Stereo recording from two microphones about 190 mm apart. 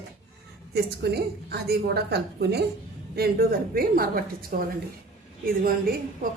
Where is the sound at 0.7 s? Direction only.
60° right (ahead or behind).